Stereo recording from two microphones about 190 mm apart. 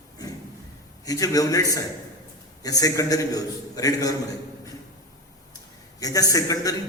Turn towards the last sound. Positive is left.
turn(degrees=20)  # may be behind; listen again after turning